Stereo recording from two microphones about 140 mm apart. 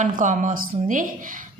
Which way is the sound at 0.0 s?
65° right (ahead or behind).